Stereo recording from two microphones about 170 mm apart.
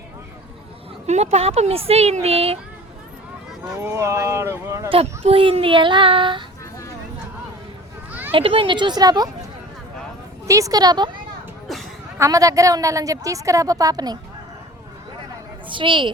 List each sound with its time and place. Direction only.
1.0 s speech: 40° right (ahead or behind)
3.8 s speech: 15° right (ahead or behind)
4.9 s speech: 35° right (ahead or behind)
8.3 s a woman's voice: 30° right (ahead or behind)
10.4 s a woman's voice: 20° right (ahead or behind)
11.7 s a sound: centre (ahead or behind)
12.2 s a woman's voice: 20° right (ahead or behind)
15.7 s a woman's voice: 30° right (ahead or behind)